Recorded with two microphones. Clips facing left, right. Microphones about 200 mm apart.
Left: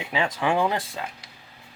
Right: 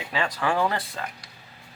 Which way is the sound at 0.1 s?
20° left (ahead or behind).